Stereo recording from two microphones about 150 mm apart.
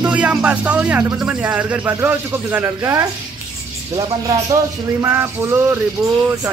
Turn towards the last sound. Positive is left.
turn(degrees=-15)  # may be behind; listen again after turning